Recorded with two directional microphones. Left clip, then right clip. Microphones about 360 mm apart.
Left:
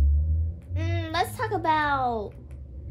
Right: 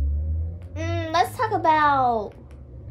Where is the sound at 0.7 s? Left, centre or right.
Centre.